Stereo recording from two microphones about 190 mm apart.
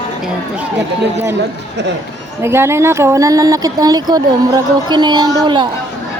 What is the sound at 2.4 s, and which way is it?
Speech, 15° right (ahead or behind).